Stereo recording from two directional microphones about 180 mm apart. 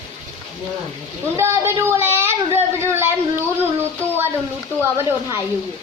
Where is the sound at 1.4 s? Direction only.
15° right (ahead or behind).